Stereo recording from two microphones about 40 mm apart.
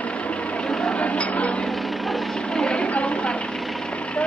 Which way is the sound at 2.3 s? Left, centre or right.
Centre.